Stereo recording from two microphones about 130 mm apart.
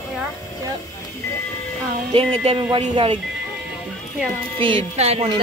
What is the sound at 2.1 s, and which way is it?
Speech, 50° right (ahead or behind).